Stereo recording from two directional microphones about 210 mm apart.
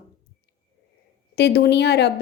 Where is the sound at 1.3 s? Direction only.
50° left (ahead or behind).